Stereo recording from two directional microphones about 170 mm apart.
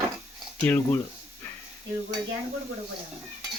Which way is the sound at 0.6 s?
15° left (ahead or behind).